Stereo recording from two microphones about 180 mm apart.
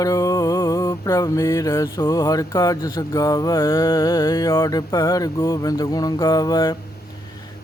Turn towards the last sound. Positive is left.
turn(degrees=20)  # may be behind; listen again after turning